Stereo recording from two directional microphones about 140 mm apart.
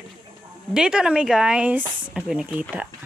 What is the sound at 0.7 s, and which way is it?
Speech, 5° right (ahead or behind).